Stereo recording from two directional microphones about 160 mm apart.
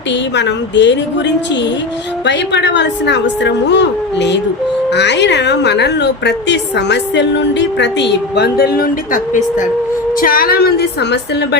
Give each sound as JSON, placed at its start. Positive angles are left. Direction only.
{"t": 0.3, "sound": "a woman's voice", "side_deg": 90}
{"t": 2.2, "sound": "a woman's voice", "side_deg": 90}
{"t": 10.2, "sound": "a woman's voice", "side_deg": 65}